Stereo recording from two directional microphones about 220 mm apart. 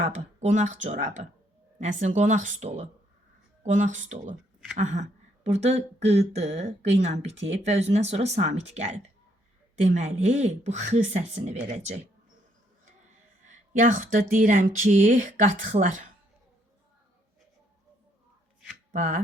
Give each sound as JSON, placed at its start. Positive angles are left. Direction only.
{"t": 0.0, "sound": "speech", "side_deg": -30}
{"t": 13.7, "sound": "speech", "side_deg": -35}
{"t": 18.9, "sound": "speech", "side_deg": -35}